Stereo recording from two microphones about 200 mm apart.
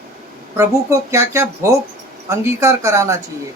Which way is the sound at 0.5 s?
15° right (ahead or behind).